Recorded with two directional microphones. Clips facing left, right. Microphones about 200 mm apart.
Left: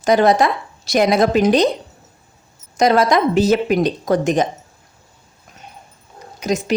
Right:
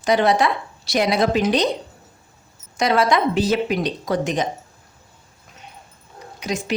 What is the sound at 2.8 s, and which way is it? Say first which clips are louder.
A woman's voice: left 4 dB; 40° left (ahead or behind).